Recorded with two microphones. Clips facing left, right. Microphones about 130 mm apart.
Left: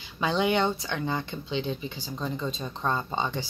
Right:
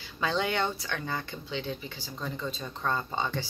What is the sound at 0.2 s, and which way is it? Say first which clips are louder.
Speech: left 4 dB; 15° left (ahead or behind).